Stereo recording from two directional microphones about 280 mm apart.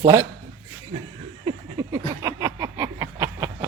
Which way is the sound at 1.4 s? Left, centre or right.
Centre.